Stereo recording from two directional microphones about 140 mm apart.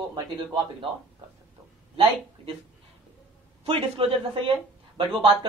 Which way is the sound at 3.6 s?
40° right (ahead or behind).